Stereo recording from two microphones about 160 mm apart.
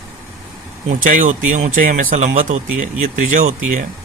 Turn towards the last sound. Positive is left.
turn(degrees=-55)  # may be behind; listen again after turning